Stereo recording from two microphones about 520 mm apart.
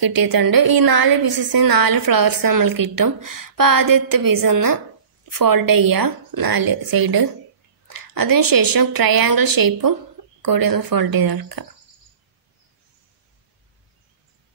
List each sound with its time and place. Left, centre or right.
0.0 s a woman's voice: right